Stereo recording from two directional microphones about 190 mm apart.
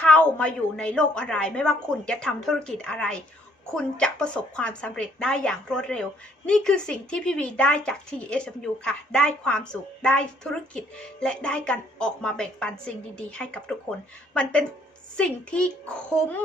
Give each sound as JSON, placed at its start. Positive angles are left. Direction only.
{"t": 0.0, "sound": "a woman's voice", "side_deg": 5}
{"t": 15.1, "sound": "a woman's voice", "side_deg": 5}